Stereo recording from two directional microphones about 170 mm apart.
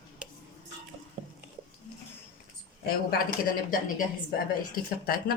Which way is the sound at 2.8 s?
60° left (ahead or behind).